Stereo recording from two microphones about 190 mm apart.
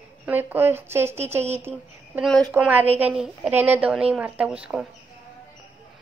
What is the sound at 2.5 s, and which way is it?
A woman's voice, 10° right (ahead or behind).